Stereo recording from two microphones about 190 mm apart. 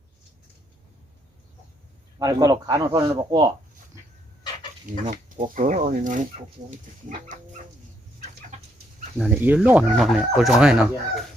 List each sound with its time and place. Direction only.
2.1 s a man's voice: 20° right (ahead or behind)
4.9 s speech: 40° right (ahead or behind)
7.2 s dog: 40° right (ahead or behind)
9.1 s speech: 10° right (ahead or behind)